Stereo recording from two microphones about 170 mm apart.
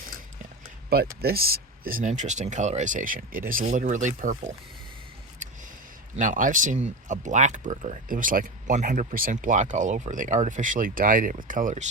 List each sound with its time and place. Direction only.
1.2 s speech: 65° right (ahead or behind); by 4.4 s 50° right (ahead or behind)
6.1 s speech: 50° right (ahead or behind)